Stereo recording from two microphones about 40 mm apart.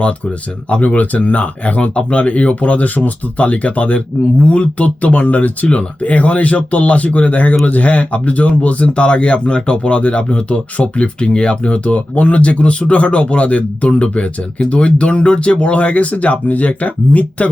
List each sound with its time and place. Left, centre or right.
0.7 s speech: left